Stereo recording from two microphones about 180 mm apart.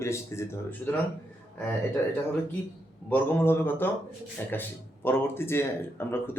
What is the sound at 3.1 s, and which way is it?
Speech, 10° left (ahead or behind).